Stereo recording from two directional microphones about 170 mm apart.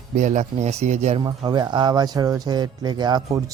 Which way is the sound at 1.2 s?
25° right (ahead or behind).